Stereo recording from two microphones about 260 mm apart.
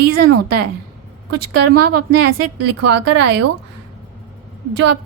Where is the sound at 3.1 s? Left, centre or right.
Right.